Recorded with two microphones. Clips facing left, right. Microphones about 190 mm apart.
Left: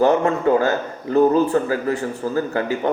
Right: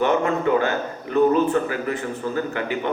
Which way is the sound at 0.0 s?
40° left (ahead or behind).